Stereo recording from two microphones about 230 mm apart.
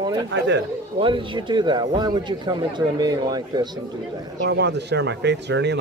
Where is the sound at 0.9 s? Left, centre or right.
Right.